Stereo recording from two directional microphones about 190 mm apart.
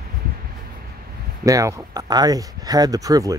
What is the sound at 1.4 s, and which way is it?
Speech, 15° right (ahead or behind).